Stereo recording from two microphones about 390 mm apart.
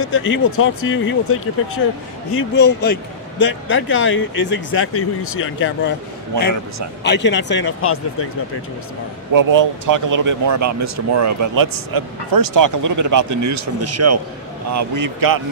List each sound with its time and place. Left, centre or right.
0.0 s a man's voice: left
2.3 s a man's voice: left
7.0 s a man's voice: left
9.3 s speech: right